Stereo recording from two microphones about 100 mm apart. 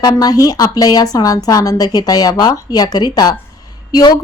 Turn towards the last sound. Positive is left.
turn(degrees=45)  # may be behind; listen again after turning